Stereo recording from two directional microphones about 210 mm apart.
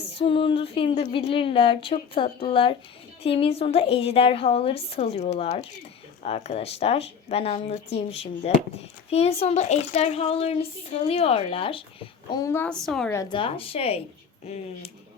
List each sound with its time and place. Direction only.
0.2 s speech: 25° left (ahead or behind); by 13.1 s centre (ahead or behind)
13.1 s speech: 25° left (ahead or behind)